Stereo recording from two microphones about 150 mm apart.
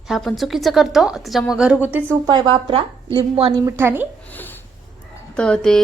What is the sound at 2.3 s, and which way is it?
Speech, 35° right (ahead or behind).